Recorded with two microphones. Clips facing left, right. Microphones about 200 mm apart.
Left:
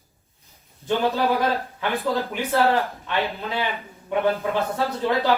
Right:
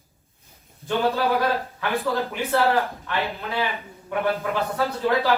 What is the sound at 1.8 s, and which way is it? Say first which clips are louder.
Speech: even; 15° left (ahead or behind).